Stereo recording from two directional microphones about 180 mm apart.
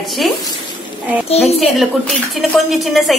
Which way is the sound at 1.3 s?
35° left (ahead or behind).